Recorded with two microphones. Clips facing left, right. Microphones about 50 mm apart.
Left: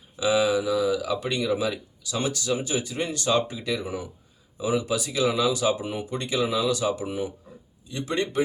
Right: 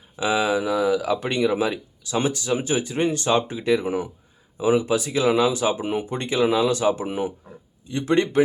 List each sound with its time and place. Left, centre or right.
0.2 s speech: right